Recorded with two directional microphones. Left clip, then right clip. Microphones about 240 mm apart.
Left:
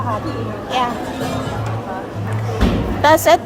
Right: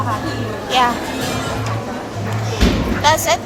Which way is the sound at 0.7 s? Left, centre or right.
Centre.